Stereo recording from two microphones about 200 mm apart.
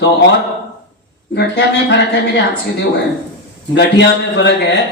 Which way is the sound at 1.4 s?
60° left (ahead or behind).